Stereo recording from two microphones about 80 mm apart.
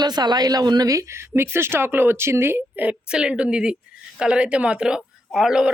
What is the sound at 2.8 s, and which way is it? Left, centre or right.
Speech, centre.